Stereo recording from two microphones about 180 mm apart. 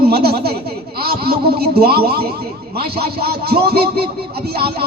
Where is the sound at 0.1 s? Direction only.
60° right (ahead or behind).